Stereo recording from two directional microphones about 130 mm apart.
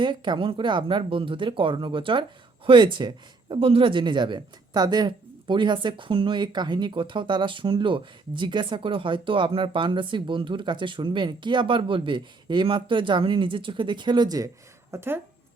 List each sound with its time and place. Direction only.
0.0 s a woman's voice: 40° right (ahead or behind); by 15.2 s 20° right (ahead or behind)